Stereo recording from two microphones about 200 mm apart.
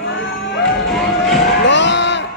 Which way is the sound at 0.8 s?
Centre (ahead or behind).